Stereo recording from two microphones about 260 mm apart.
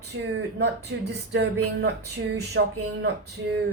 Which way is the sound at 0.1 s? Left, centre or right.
Right.